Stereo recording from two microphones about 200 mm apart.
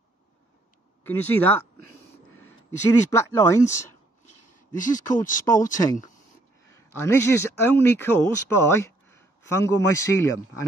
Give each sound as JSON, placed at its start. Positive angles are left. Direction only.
{"t": 1.0, "sound": "speech", "side_deg": 10}
{"t": 2.9, "sound": "speech", "side_deg": 15}
{"t": 4.6, "sound": "speech", "side_deg": 40}
{"t": 6.7, "sound": "speech", "side_deg": 10}